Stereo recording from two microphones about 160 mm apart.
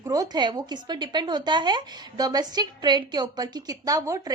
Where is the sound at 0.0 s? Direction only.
25° right (ahead or behind).